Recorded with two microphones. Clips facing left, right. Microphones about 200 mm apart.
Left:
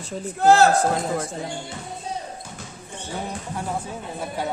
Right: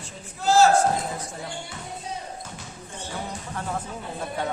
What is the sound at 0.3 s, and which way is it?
Speech, 60° left (ahead or behind).